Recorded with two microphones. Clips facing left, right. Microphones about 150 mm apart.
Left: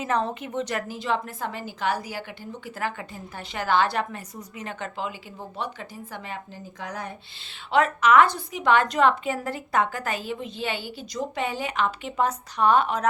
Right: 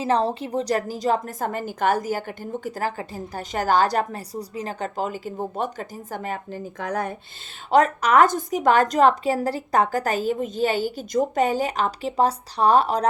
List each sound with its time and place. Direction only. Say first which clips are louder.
0.0 s a woman's voice: right 4 dB; 30° right (ahead or behind); by 7.2 s 50° right (ahead or behind)
7.7 s a woman's voice: right 2 dB; 40° right (ahead or behind)